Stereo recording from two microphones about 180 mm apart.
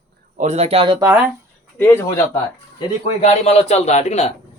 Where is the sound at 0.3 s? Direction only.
40° right (ahead or behind).